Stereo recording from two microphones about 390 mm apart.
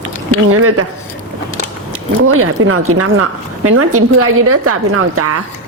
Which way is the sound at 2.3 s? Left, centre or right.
Right.